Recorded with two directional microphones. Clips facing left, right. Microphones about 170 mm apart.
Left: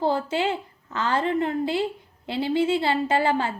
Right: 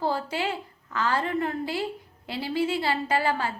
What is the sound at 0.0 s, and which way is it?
A woman's voice, 25° left (ahead or behind).